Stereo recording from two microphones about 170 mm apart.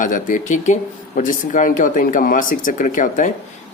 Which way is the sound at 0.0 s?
50° left (ahead or behind).